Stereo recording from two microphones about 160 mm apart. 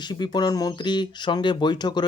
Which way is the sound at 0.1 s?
25° left (ahead or behind).